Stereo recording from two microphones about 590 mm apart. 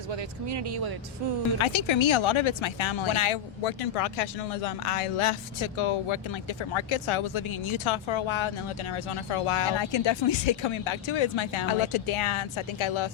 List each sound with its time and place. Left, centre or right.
1.5 s speech: left